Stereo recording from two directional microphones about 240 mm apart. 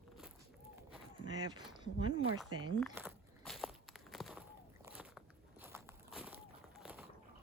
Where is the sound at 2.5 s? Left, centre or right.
Right.